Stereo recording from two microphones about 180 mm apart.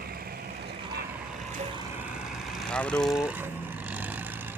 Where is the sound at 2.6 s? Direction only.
5° left (ahead or behind).